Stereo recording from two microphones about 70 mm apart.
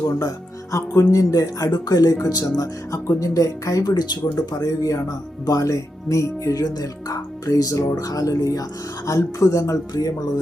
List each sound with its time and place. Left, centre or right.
0.2 s speech: left
3.8 s speech: left
4.4 s speech: left